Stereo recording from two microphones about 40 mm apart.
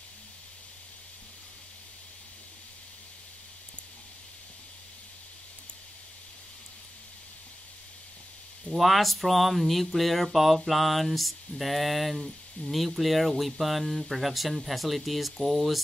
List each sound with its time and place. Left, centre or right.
8.6 s speech: centre